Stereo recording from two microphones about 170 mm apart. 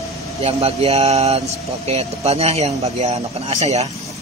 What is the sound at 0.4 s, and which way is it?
Speech, 35° right (ahead or behind).